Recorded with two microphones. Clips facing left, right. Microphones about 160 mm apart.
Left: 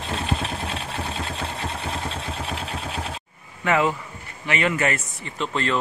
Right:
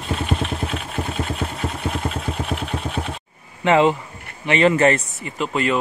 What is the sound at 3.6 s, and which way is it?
A man's voice, 25° right (ahead or behind).